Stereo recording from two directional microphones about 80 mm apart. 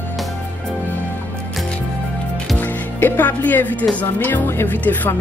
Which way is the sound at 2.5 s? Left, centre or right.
Left.